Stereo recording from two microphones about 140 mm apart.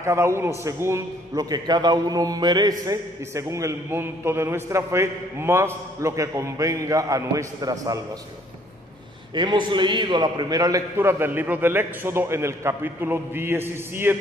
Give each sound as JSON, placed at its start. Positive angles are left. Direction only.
{"t": 0.0, "sound": "a man's voice", "side_deg": -20}
{"t": 9.3, "sound": "a man's voice", "side_deg": -35}